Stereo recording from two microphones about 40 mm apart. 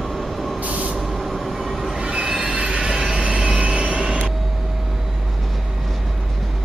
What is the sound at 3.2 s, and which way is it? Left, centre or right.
Vehicle, right.